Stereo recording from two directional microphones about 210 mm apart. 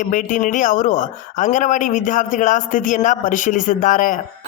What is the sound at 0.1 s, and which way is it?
A man's voice, 40° left (ahead or behind).